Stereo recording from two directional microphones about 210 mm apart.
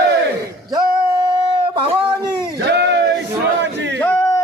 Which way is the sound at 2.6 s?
55° right (ahead or behind).